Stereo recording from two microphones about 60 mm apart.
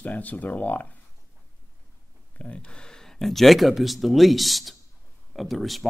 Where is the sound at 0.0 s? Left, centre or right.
Left.